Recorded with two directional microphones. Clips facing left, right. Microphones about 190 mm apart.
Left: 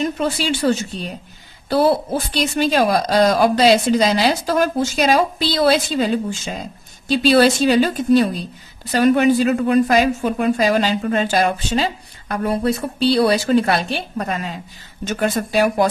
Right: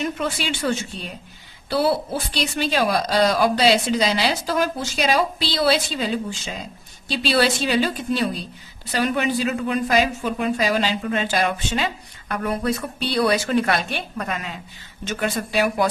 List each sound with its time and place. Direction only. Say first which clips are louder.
0.0 s a woman's voice: left 5 dB; 35° left (ahead or behind)